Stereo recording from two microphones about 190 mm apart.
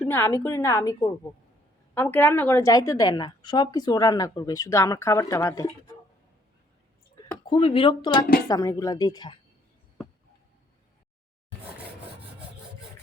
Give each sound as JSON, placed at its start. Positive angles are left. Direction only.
{"t": 0.0, "sound": "a woman's voice", "side_deg": 10}
{"t": 7.4, "sound": "speech", "side_deg": 25}